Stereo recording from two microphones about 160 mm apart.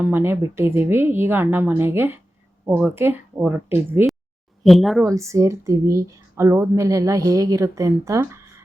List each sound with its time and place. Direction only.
0.0 s speech: 15° right (ahead or behind)
4.6 s speech: centre (ahead or behind)
5.0 s speech: 20° right (ahead or behind)